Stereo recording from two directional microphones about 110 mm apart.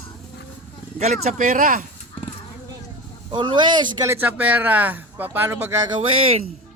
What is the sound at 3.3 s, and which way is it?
Speech, 45° right (ahead or behind).